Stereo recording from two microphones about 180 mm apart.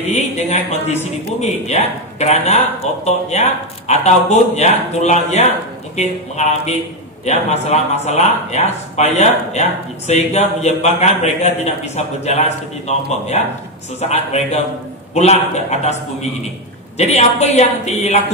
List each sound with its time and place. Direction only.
0.0 s a man's voice: 35° left (ahead or behind)